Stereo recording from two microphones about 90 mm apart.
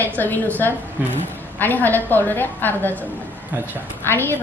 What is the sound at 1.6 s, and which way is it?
A woman's voice, 20° left (ahead or behind).